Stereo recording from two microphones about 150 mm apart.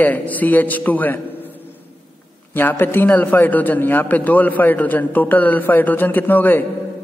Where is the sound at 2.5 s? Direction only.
15° left (ahead or behind).